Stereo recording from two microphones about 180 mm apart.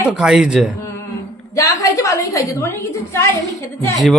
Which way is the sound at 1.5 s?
20° left (ahead or behind).